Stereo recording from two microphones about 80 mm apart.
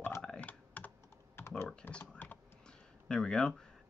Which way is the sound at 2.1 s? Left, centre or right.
Centre.